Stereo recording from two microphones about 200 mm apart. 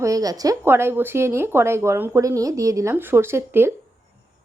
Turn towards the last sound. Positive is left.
turn(degrees=-10)  # may be behind; listen again after turning